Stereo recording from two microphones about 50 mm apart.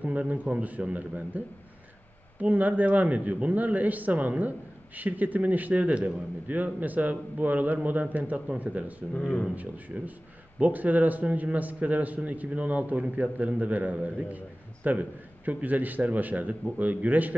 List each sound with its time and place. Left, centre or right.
0.5 s a man's voice: right
2.4 s a man's voice: right
8.2 s speech: right
8.5 s a man's voice: right
9.2 s speech: centre
9.6 s a man's voice: right